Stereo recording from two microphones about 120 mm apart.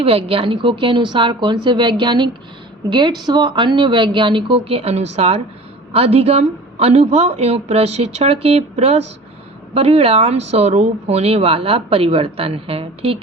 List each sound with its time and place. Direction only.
0.0 s a woman's voice: 50° right (ahead or behind)